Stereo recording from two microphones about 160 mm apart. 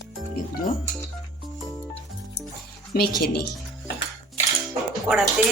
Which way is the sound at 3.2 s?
80° left.